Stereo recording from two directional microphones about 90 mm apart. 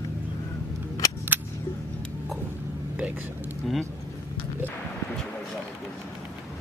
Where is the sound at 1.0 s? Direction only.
40° left (ahead or behind).